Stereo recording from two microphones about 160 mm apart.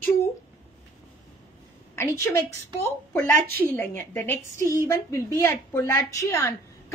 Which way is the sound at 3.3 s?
70° right (ahead or behind).